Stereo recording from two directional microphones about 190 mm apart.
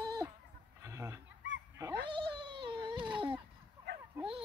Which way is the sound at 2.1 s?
25° right (ahead or behind).